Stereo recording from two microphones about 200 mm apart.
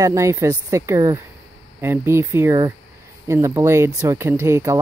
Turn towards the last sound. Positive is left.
turn(degrees=-15)  # may be behind; listen again after turning